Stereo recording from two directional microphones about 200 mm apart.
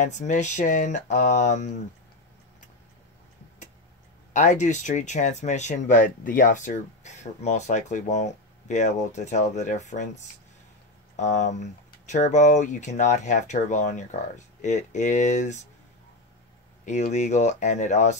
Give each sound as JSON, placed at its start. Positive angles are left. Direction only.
{"t": 0.0, "sound": "speech", "side_deg": 40}
{"t": 4.3, "sound": "speech", "side_deg": 35}
{"t": 16.8, "sound": "speech", "side_deg": 35}